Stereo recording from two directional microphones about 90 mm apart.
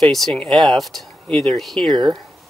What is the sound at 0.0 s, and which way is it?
Speech, 5° left (ahead or behind).